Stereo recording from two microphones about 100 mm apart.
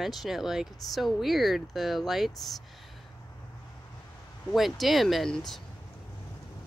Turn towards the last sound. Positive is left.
turn(degrees=5)  # may be behind; listen again after turning